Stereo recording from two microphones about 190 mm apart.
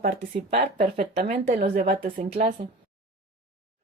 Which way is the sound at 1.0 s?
55° right (ahead or behind).